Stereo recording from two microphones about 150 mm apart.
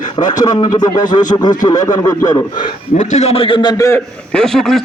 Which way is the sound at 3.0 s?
50° left (ahead or behind).